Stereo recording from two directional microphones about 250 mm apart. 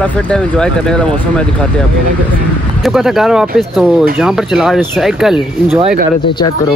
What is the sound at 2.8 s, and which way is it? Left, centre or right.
Speech, centre.